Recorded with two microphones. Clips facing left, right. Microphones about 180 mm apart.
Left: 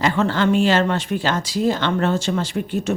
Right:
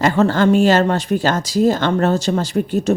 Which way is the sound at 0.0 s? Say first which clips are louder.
Right 4 dB; 40° right (ahead or behind).